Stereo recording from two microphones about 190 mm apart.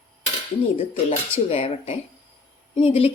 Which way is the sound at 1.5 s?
30° left (ahead or behind).